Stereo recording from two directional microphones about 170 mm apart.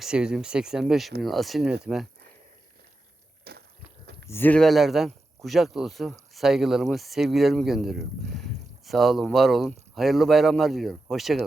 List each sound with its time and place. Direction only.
0.0 s speech: 5° right (ahead or behind)
3.5 s a sound: 65° right (ahead or behind)
4.3 s speech: 10° left (ahead or behind)